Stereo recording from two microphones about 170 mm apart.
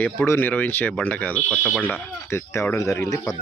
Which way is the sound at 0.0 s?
15° left (ahead or behind).